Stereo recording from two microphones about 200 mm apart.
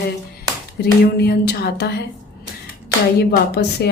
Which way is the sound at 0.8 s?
50° left (ahead or behind).